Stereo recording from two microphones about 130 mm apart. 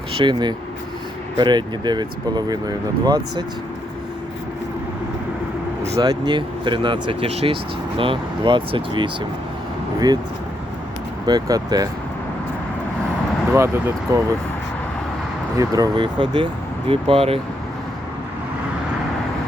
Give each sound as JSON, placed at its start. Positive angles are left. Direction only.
{"t": 0.2, "sound": "speech", "side_deg": -35}
{"t": 6.0, "sound": "speech", "side_deg": -30}
{"t": 11.3, "sound": "speech", "side_deg": -30}
{"t": 13.5, "sound": "speech", "side_deg": -20}
{"t": 15.5, "sound": "speech", "side_deg": -30}